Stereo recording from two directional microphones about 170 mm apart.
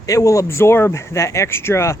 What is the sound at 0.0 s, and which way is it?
Speech, 20° left (ahead or behind).